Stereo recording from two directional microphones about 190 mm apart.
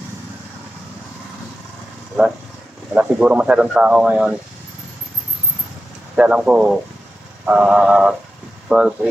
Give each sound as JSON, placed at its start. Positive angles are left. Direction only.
{"t": 2.9, "sound": "speech", "side_deg": -5}
{"t": 6.1, "sound": "speech", "side_deg": -5}